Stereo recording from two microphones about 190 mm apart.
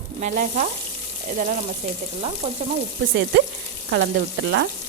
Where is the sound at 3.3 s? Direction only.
70° right (ahead or behind).